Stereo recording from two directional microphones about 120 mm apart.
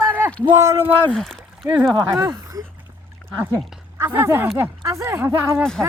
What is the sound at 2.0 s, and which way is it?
Speech, 20° right (ahead or behind).